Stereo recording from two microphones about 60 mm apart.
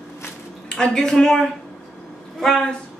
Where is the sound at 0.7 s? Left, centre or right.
Centre.